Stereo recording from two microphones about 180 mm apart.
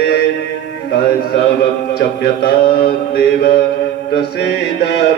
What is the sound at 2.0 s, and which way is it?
Music, 60° left (ahead or behind).